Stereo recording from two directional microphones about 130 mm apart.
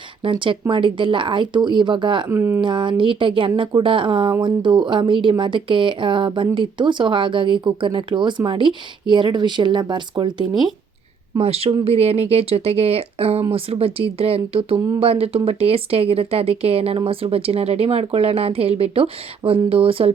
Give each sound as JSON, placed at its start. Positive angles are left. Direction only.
{"t": 0.2, "sound": "speech", "side_deg": -40}
{"t": 2.3, "sound": "speech", "side_deg": -20}
{"t": 2.6, "sound": "speech", "side_deg": -40}
{"t": 11.3, "sound": "speech", "side_deg": -50}